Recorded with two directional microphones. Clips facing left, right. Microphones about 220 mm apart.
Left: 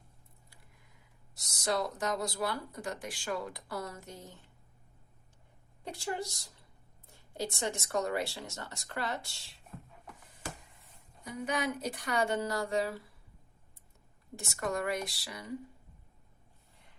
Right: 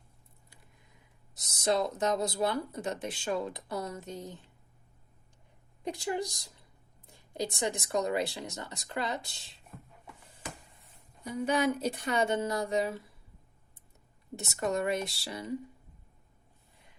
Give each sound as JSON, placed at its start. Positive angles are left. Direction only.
{"t": 1.4, "sound": "speech", "side_deg": -20}
{"t": 5.8, "sound": "speech", "side_deg": -15}
{"t": 11.2, "sound": "speech", "side_deg": -30}
{"t": 14.3, "sound": "speech", "side_deg": -20}